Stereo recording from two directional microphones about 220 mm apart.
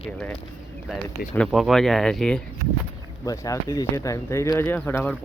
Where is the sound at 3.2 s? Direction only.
15° left (ahead or behind).